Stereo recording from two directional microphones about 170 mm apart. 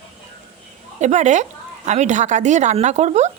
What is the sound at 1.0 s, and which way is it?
Speech, 45° right (ahead or behind).